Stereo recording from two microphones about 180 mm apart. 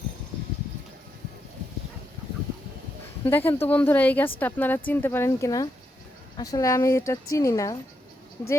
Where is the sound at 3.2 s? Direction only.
10° left (ahead or behind).